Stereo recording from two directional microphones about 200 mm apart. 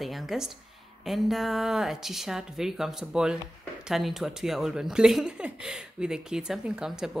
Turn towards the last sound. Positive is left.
turn(degrees=-5)  # may be behind; listen again after turning